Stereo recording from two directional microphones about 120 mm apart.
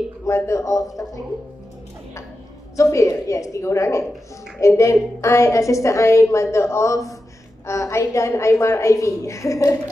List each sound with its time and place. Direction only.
0.2 s a woman's voice: 25° left (ahead or behind)
2.7 s a woman's voice: 25° left (ahead or behind)